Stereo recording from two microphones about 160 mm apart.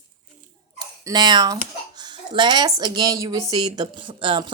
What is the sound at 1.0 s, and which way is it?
A woman's voice, 25° right (ahead or behind).